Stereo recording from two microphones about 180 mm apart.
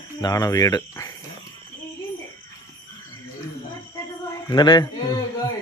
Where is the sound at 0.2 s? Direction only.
20° left (ahead or behind).